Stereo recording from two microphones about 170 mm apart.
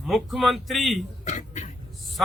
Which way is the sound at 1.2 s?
45° left (ahead or behind).